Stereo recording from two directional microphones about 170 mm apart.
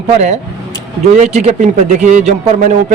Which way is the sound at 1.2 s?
45° right (ahead or behind).